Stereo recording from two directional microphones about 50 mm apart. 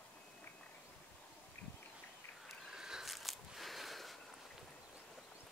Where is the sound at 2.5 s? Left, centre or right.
Centre.